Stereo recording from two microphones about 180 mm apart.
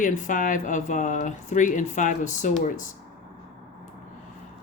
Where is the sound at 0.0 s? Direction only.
45° left (ahead or behind).